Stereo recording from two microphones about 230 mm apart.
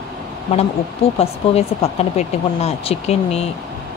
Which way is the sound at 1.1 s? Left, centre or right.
Left.